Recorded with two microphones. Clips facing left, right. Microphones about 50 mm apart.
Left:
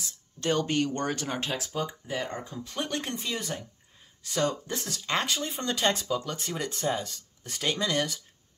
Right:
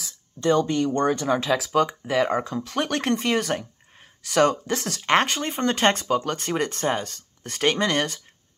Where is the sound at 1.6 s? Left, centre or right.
Right.